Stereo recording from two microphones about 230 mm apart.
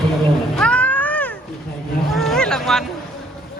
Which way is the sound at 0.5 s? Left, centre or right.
Centre.